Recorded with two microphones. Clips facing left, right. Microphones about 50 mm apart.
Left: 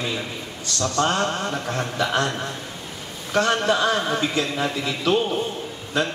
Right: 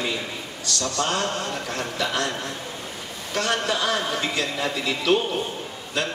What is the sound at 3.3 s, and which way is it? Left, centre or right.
A man's voice, left.